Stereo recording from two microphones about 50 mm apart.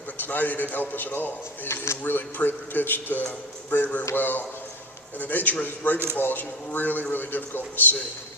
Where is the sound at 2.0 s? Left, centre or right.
Left.